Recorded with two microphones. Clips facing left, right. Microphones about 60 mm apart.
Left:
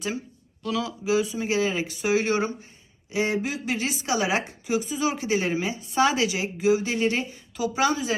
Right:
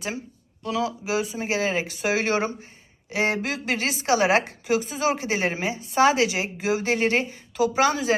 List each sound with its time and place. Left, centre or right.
0.6 s speech: right